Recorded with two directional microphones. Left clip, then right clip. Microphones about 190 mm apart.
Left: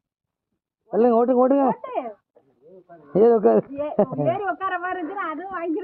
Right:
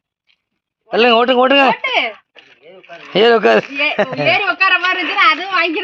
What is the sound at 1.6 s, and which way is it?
A woman's voice, 25° right (ahead or behind).